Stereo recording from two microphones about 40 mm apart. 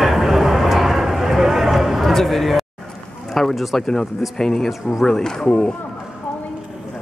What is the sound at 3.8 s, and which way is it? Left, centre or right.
Speech, centre.